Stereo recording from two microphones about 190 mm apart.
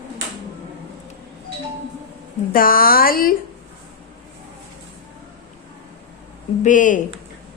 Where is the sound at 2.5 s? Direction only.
50° left (ahead or behind).